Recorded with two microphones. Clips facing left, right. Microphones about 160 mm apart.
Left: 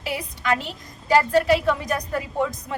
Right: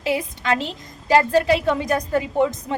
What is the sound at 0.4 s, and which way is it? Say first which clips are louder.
A woman's voice: left 1 dB; 25° right (ahead or behind).